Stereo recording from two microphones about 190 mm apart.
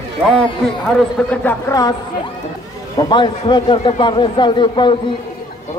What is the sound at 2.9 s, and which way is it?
A man's voice, 25° left (ahead or behind).